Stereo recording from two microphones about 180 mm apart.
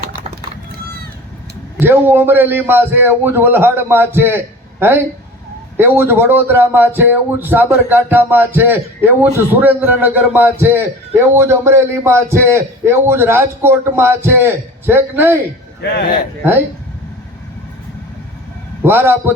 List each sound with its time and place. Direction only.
1.8 s a man's voice: 10° right (ahead or behind)
5.7 s a man's voice: 10° right (ahead or behind)
18.8 s a man's voice: 10° right (ahead or behind)